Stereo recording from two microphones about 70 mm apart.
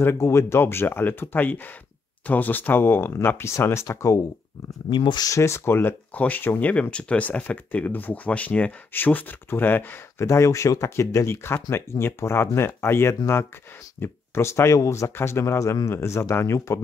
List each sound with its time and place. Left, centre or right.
0.0 s speech: left
4.9 s speech: left
5.3 s speech: left
10.1 s speech: left